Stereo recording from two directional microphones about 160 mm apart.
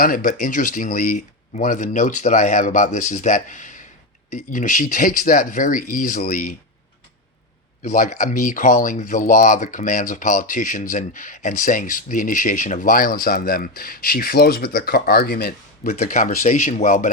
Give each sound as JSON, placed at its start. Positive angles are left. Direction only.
{"t": 0.0, "sound": "speech", "side_deg": 60}
{"t": 7.8, "sound": "speech", "side_deg": 55}
{"t": 16.0, "sound": "speech", "side_deg": 55}